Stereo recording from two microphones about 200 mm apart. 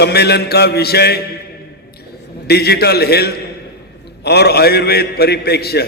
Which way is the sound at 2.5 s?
55° left (ahead or behind).